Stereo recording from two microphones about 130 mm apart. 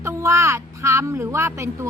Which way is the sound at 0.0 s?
20° right (ahead or behind).